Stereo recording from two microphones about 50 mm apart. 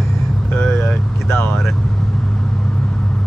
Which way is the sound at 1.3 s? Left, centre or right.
Left.